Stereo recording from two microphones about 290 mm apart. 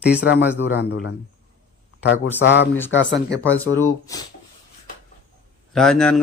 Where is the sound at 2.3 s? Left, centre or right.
Left.